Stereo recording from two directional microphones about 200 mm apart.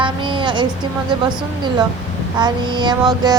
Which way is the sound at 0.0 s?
25° right (ahead or behind).